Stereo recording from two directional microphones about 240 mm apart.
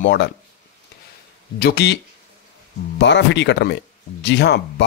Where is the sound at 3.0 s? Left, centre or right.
Left.